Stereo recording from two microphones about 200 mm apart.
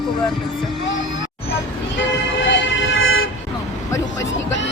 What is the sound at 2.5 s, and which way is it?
Emergency vehicle, 75° left (ahead or behind).